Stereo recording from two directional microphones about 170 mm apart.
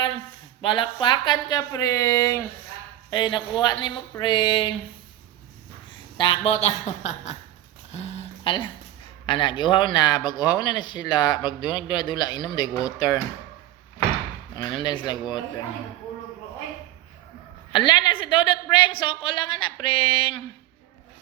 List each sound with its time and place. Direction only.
0.6 s speech: 30° left (ahead or behind)
6.1 s speech: 30° left (ahead or behind)
7.9 s a sound: 40° left (ahead or behind)
9.2 s speech: 30° left (ahead or behind)
14.5 s speech: 25° left (ahead or behind)
17.7 s speech: 25° left (ahead or behind)